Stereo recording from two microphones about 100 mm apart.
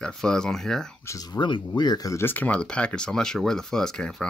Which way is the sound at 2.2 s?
15° left (ahead or behind).